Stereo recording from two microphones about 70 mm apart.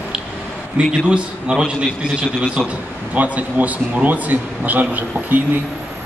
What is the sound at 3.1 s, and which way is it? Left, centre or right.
A man's voice, right.